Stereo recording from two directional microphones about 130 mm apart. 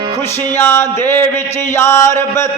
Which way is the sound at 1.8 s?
20° left (ahead or behind).